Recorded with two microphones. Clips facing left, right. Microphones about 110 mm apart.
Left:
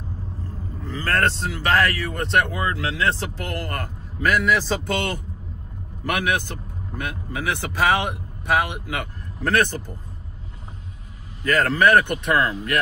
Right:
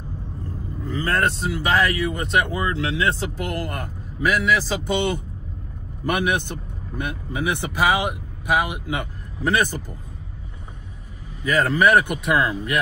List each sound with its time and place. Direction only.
0.8 s speech: 15° right (ahead or behind)
2.5 s speech: 25° right (ahead or behind)
4.2 s a man's voice: 5° right (ahead or behind)
4.8 s speech: 15° right (ahead or behind)
7.8 s speech: 5° right (ahead or behind)
11.4 s speech: 10° right (ahead or behind)